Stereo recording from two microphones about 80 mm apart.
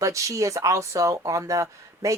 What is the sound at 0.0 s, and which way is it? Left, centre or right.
A man's voice, right.